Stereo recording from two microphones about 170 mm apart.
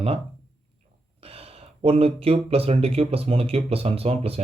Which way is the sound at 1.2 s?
35° right (ahead or behind).